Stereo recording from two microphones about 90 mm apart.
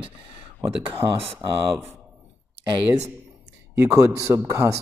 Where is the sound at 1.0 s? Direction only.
40° right (ahead or behind).